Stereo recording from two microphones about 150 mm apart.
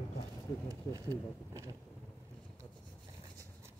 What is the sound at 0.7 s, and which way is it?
Speech, 25° right (ahead or behind).